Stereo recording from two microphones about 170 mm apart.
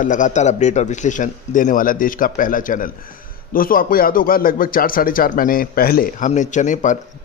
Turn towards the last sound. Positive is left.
turn(degrees=45)  # may be behind; listen again after turning